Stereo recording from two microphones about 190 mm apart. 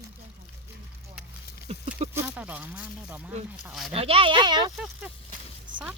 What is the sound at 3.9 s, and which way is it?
Speech, 30° right (ahead or behind).